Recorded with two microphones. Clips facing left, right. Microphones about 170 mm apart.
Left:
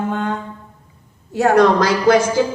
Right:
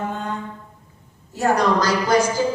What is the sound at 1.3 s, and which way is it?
Speech, 65° left (ahead or behind).